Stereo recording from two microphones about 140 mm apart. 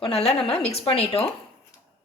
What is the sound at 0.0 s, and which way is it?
A woman's voice, 45° left (ahead or behind).